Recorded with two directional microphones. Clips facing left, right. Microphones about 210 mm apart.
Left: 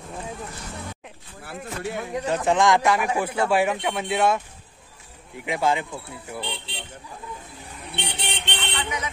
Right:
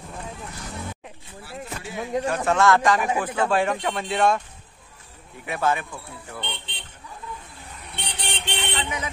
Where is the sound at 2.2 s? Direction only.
20° left (ahead or behind).